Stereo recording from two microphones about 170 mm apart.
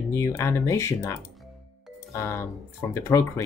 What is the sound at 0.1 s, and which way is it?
Speech, 15° left (ahead or behind).